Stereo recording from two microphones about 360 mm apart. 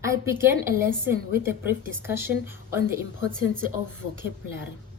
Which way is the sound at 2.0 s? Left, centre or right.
Centre.